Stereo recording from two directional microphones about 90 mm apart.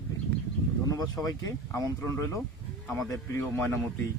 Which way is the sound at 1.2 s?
40° left (ahead or behind).